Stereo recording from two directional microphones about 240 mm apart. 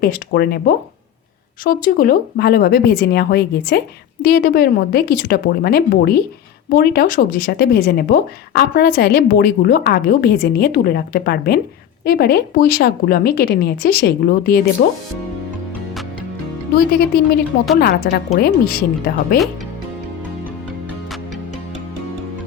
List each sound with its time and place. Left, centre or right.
0.0 s speech: left
17.7 s speech: left